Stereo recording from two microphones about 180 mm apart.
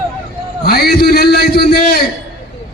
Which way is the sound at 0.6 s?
60° left (ahead or behind).